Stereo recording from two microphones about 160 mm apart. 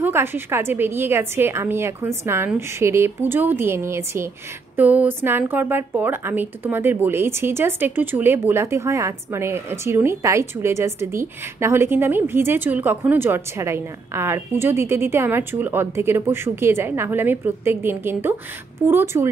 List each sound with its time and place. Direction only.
0.0 s a woman's voice: 15° right (ahead or behind)